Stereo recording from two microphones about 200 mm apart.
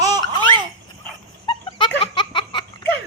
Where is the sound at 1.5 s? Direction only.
25° left (ahead or behind).